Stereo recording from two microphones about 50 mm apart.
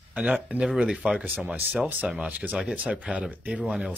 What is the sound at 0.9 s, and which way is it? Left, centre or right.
Speech, centre.